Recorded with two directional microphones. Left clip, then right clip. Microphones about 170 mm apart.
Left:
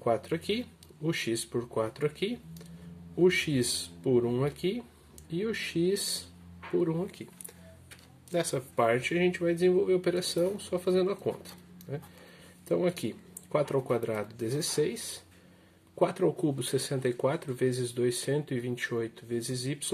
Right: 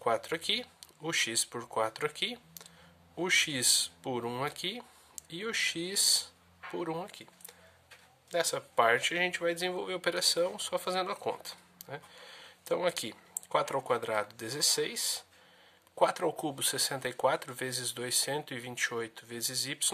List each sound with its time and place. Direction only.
0.0 s speech: 35° right (ahead or behind)
8.3 s speech: 20° right (ahead or behind)